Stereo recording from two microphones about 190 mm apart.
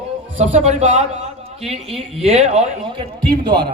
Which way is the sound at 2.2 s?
35° right (ahead or behind).